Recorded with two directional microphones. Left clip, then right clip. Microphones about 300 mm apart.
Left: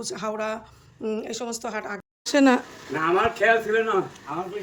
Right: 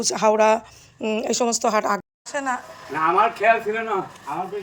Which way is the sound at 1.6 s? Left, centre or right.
Centre.